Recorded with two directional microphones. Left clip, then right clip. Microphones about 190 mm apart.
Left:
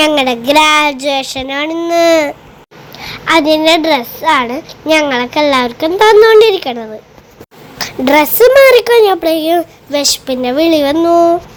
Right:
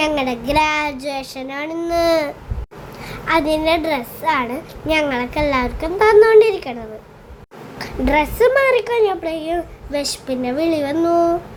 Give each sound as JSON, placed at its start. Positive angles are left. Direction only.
{"t": 0.0, "sound": "a woman's voice", "side_deg": 25}